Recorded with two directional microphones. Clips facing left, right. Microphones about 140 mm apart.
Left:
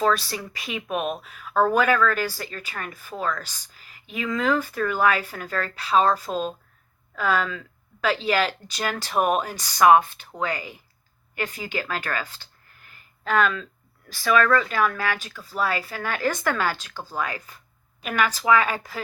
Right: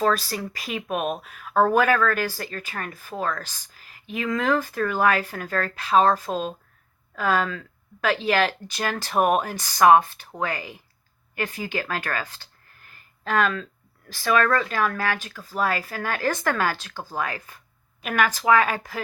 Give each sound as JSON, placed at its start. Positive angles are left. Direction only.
{"t": 0.0, "sound": "speech", "side_deg": -40}
{"t": 18.0, "sound": "speech", "side_deg": -45}